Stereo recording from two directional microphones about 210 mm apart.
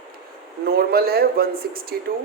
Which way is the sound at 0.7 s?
45° right (ahead or behind).